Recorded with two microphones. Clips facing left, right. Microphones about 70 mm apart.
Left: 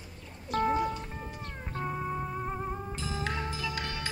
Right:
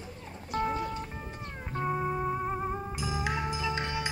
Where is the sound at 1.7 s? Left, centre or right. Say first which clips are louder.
Right 4 dB; centre.